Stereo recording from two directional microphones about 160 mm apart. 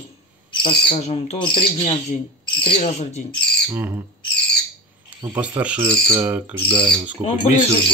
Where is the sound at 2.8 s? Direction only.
45° left (ahead or behind).